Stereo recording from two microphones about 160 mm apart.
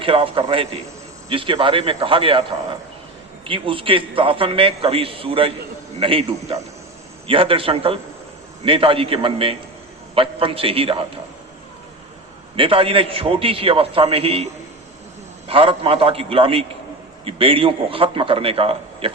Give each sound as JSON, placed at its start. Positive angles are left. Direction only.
{"t": 0.0, "sound": "a man's voice", "side_deg": -35}
{"t": 12.5, "sound": "a man's voice", "side_deg": -35}
{"t": 15.4, "sound": "a man's voice", "side_deg": -35}